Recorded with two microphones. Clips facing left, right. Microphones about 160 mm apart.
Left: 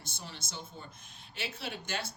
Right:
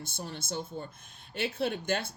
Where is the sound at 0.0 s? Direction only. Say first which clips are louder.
Right 7 dB; 50° right (ahead or behind).